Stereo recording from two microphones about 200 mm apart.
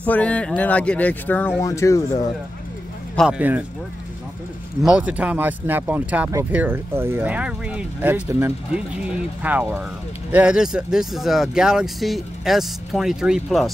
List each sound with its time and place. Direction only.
0.0 s speech: 5° left (ahead or behind)
3.2 s speech: 5° right (ahead or behind)
4.8 s speech: 5° right (ahead or behind)